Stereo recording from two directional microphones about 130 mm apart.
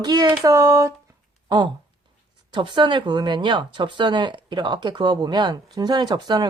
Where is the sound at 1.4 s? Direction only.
35° right (ahead or behind).